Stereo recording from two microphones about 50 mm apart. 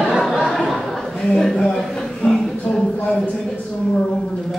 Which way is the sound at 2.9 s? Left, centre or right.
Left.